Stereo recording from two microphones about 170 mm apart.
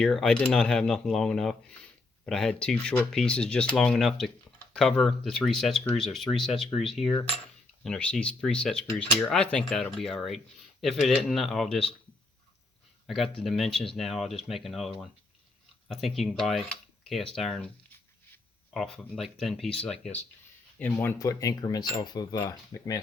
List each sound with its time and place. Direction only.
0.0 s speech: 5° left (ahead or behind)
13.1 s speech: centre (ahead or behind)
18.7 s speech: centre (ahead or behind); by 23.0 s 20° left (ahead or behind)